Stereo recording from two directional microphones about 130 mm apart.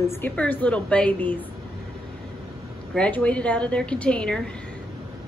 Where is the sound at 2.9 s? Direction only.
10° left (ahead or behind).